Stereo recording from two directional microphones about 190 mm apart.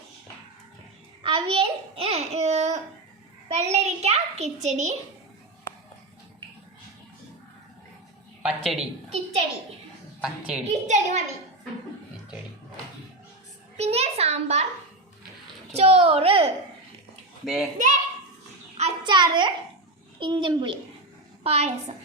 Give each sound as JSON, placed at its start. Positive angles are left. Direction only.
{"t": 1.2, "sound": "a sound", "side_deg": -25}
{"t": 3.5, "sound": "a child's voice", "side_deg": -35}
{"t": 8.4, "sound": "a woman's voice", "side_deg": 0}
{"t": 10.2, "sound": "a woman's voice", "side_deg": -5}
{"t": 10.7, "sound": "a child's voice", "side_deg": -40}
{"t": 13.7, "sound": "a sound", "side_deg": -35}
{"t": 15.7, "sound": "a child's voice", "side_deg": -35}
{"t": 17.4, "sound": "a child's voice", "side_deg": 0}
{"t": 18.8, "sound": "a sound", "side_deg": -25}
{"t": 20.1, "sound": "a child's voice", "side_deg": -25}